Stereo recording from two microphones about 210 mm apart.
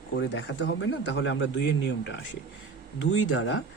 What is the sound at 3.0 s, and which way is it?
Speech, 65° left (ahead or behind).